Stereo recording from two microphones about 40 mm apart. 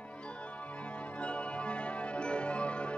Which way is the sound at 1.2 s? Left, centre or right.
Left.